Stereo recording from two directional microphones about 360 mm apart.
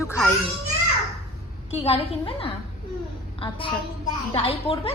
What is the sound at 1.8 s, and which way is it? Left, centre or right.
Speech, centre.